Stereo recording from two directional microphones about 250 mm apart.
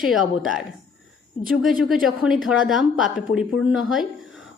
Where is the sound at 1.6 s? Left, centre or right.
Centre.